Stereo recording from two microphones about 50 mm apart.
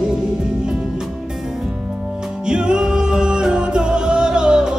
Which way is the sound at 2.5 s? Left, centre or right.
Centre.